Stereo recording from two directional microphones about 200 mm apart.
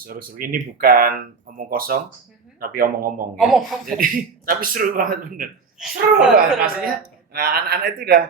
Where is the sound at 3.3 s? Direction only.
Centre (ahead or behind).